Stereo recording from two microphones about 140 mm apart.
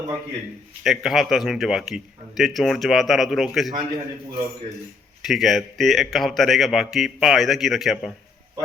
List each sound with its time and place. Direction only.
0.9 s a man's voice: centre (ahead or behind)
3.7 s a man's voice: 30° right (ahead or behind)
5.2 s a man's voice: centre (ahead or behind)